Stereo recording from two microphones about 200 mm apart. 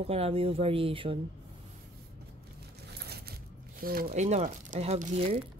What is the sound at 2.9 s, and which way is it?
Coin, 55° right (ahead or behind).